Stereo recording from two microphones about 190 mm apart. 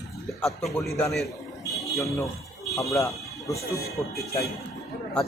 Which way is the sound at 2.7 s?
15° left (ahead or behind).